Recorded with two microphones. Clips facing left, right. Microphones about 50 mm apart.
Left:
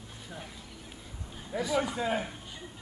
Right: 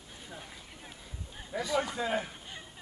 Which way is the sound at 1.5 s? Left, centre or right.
Centre.